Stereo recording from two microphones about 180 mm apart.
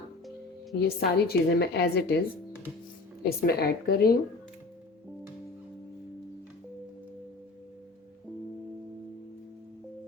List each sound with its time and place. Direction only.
0.8 s a woman's voice: 60° left (ahead or behind)
3.2 s a woman's voice: 60° left (ahead or behind)